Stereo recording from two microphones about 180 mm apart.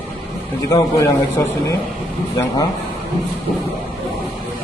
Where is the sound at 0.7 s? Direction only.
20° left (ahead or behind).